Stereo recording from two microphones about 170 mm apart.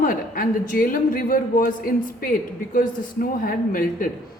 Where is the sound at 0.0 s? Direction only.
55° left (ahead or behind).